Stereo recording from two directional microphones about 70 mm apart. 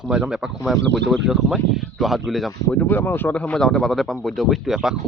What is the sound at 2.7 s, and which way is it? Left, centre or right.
Speech, left.